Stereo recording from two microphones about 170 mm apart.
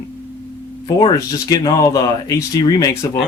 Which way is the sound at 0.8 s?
25° left (ahead or behind).